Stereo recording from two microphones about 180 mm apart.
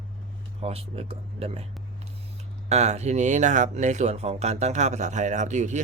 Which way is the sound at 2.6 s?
40° right (ahead or behind).